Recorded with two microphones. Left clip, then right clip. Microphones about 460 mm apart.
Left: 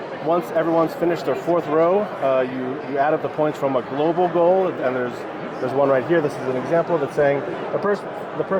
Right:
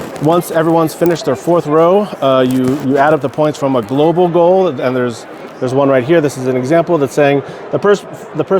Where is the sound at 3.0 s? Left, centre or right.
Right.